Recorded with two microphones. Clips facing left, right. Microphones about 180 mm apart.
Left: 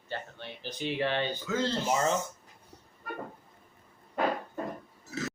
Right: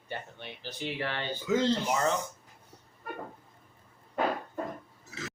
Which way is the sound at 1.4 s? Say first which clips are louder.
Right 3 dB; 15° right (ahead or behind).